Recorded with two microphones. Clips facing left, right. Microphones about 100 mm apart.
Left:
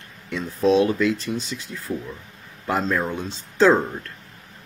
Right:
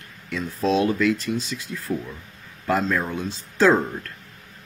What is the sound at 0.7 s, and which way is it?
Speech, 25° left (ahead or behind).